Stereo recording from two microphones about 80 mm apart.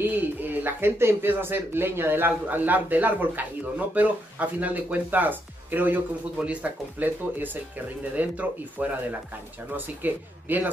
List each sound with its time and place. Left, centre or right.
0.0 s speech: right